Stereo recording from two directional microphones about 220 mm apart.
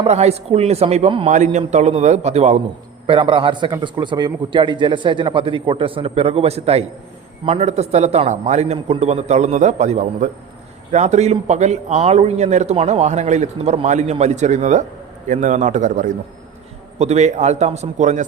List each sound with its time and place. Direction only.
0.0 s a man's voice: 30° right (ahead or behind)